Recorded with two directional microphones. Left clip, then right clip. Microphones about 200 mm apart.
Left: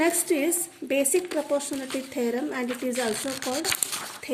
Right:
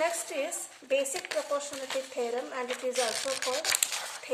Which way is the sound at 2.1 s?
50° left (ahead or behind).